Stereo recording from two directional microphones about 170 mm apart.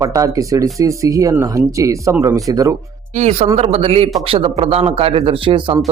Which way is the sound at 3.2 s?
40° right (ahead or behind).